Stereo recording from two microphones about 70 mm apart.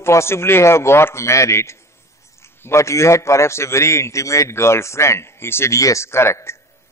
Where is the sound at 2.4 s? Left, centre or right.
Left.